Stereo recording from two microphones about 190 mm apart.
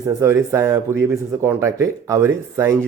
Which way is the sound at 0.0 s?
15° right (ahead or behind).